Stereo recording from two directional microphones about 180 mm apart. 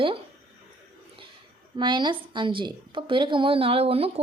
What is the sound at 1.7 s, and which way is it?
A woman's voice, 25° right (ahead or behind).